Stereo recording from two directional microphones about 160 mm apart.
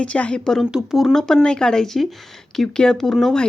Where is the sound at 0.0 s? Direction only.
5° left (ahead or behind).